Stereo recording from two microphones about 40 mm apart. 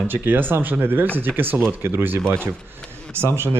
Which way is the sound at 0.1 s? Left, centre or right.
Right.